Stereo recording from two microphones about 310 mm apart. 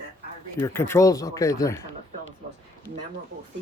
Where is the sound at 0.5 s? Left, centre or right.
Centre.